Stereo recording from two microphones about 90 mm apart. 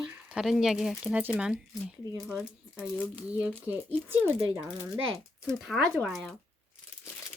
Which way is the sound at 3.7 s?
20° right (ahead or behind).